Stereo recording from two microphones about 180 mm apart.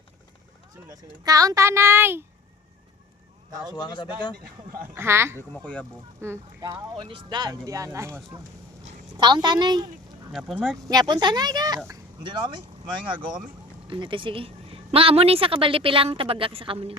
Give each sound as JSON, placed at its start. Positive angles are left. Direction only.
{"t": 0.9, "sound": "speech", "side_deg": -20}
{"t": 3.8, "sound": "speech", "side_deg": 25}
{"t": 4.9, "sound": "speech", "side_deg": -15}
{"t": 5.4, "sound": "speech", "side_deg": 5}
{"t": 6.2, "sound": "speech", "side_deg": -15}
{"t": 6.9, "sound": "speech", "side_deg": -30}
{"t": 10.3, "sound": "speech", "side_deg": 0}
{"t": 10.8, "sound": "a woman's voice", "side_deg": -20}